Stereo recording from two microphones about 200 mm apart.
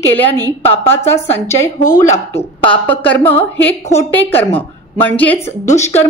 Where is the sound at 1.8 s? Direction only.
40° left (ahead or behind).